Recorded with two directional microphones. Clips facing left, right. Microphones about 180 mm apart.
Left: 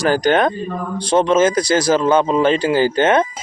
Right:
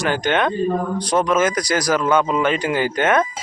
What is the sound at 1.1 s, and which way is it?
A man's voice, 25° left (ahead or behind).